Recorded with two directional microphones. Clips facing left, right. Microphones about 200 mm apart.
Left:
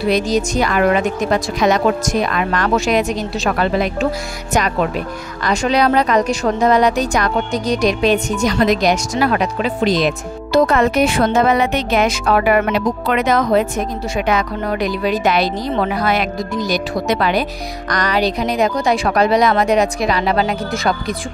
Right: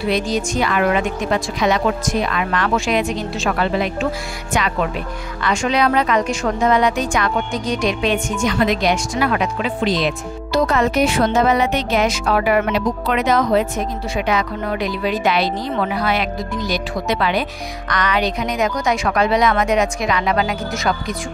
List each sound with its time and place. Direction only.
0.0 s speech: 40° left (ahead or behind)
5.4 s speech: 40° left (ahead or behind)